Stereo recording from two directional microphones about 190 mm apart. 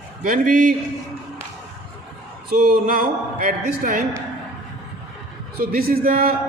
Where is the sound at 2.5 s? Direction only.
45° right (ahead or behind).